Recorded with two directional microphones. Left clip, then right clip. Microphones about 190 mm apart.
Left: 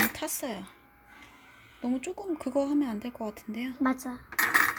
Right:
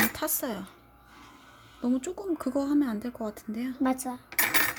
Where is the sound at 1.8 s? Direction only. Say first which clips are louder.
Right 2 dB; 20° right (ahead or behind).